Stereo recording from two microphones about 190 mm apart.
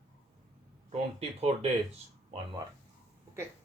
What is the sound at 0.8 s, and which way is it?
Speech, 35° right (ahead or behind).